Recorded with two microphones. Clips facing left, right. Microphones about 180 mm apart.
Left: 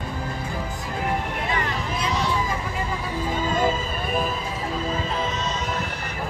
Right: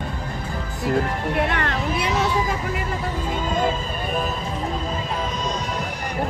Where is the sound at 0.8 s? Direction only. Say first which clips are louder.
Right 7 dB; 65° right (ahead or behind).